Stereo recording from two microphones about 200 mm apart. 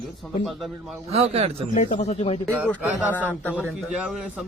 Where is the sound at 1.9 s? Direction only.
30° left (ahead or behind).